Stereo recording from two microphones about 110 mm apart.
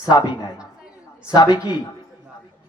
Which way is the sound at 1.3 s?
35° left (ahead or behind).